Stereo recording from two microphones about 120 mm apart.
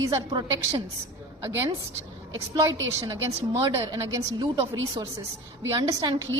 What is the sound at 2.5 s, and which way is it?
A woman's voice, 30° right (ahead or behind).